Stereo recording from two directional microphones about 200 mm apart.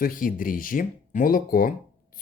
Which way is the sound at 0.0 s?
45° left (ahead or behind).